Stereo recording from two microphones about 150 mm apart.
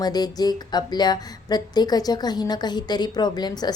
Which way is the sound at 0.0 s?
25° left (ahead or behind).